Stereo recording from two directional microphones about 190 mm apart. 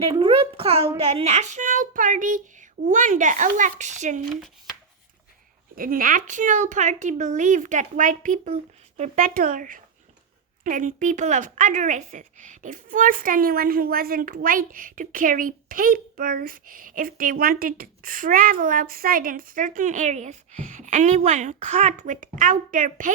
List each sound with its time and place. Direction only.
0.0 s a child's voice: 25° right (ahead or behind)
5.7 s a child's voice: 50° right (ahead or behind)